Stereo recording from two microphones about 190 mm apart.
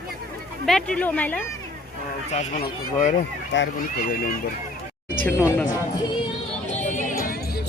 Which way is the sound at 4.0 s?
50° left (ahead or behind).